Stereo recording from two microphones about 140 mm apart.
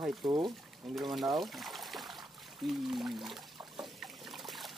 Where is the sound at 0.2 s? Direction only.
25° right (ahead or behind).